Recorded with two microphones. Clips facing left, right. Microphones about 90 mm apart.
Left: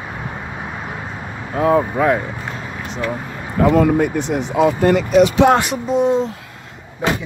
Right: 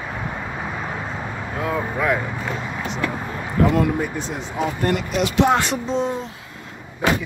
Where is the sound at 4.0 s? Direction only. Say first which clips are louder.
Left 8 dB; 65° left (ahead or behind).